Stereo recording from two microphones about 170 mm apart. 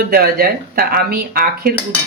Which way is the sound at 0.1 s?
60° right (ahead or behind).